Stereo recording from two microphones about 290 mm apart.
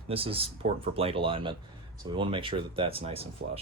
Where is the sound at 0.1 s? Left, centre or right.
Centre.